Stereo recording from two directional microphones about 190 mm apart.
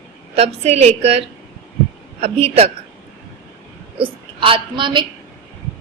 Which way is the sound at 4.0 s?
25° right (ahead or behind).